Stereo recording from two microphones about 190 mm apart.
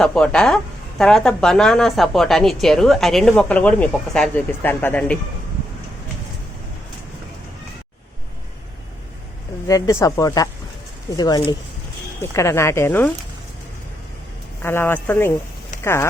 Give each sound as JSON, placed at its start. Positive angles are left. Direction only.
{"t": 0.0, "sound": "speech", "side_deg": 5}
{"t": 9.6, "sound": "speech", "side_deg": 15}
{"t": 14.6, "sound": "speech", "side_deg": 10}